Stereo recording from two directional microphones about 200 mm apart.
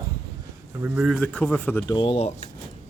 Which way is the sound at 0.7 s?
10° right (ahead or behind).